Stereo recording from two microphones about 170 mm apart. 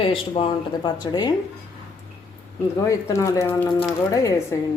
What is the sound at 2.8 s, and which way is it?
Speech, 20° left (ahead or behind).